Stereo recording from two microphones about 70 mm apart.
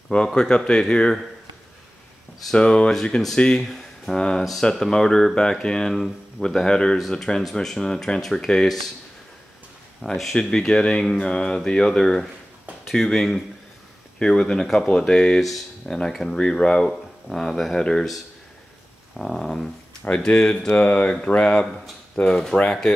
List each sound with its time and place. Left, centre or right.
0.1 s speech: centre
2.5 s speech: centre
10.0 s speech: centre
19.1 s a sound: centre
20.1 s speech: centre